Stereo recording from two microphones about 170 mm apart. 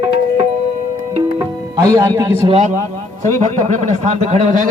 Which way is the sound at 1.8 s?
20° right (ahead or behind).